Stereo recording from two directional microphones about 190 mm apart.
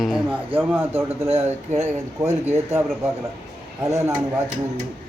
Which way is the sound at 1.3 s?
35° right (ahead or behind).